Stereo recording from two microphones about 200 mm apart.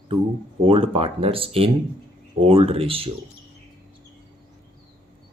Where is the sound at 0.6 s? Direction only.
30° right (ahead or behind).